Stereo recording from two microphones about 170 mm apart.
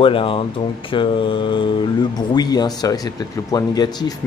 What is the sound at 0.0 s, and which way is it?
Speech, 30° left (ahead or behind).